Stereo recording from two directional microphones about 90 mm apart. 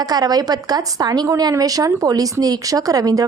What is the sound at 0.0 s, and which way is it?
Speech, 50° right (ahead or behind).